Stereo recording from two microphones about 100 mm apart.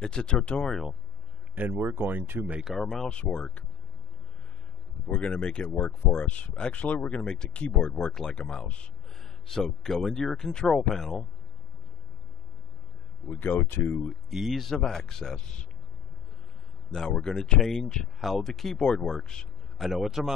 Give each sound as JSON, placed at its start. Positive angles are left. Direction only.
{"t": 0.0, "sound": "speech", "side_deg": 10}
{"t": 1.5, "sound": "speech", "side_deg": -20}
{"t": 2.5, "sound": "speech", "side_deg": 0}
{"t": 5.0, "sound": "speech", "side_deg": 15}
{"t": 13.3, "sound": "speech", "side_deg": 20}
{"t": 14.3, "sound": "speech", "side_deg": 0}
{"t": 16.9, "sound": "speech", "side_deg": 5}